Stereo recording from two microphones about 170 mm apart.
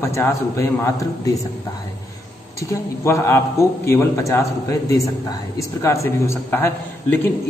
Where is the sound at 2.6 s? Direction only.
15° left (ahead or behind).